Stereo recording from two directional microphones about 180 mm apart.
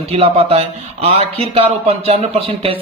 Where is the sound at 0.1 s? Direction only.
35° right (ahead or behind).